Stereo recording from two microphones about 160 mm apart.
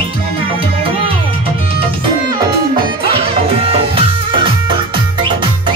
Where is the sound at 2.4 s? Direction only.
30° right (ahead or behind).